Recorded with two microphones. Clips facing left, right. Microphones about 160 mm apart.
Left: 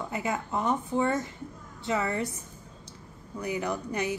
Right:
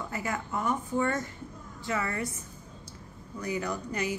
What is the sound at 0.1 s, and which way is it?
Speech, 20° left (ahead or behind).